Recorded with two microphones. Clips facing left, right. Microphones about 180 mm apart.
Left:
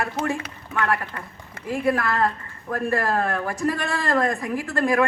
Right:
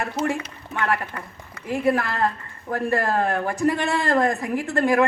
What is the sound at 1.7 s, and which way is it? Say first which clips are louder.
Speech: right 1 dB; 25° right (ahead or behind).